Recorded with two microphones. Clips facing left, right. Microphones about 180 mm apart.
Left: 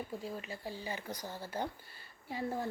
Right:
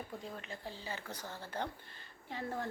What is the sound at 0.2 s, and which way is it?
Speech, 5° left (ahead or behind).